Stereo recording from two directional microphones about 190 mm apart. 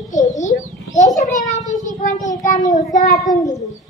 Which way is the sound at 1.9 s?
40° left (ahead or behind).